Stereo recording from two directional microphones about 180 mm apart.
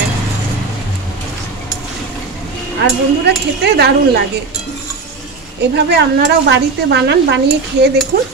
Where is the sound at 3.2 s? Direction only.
65° right (ahead or behind).